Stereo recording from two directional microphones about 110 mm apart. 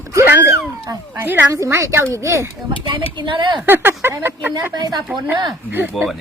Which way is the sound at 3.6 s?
20° right (ahead or behind).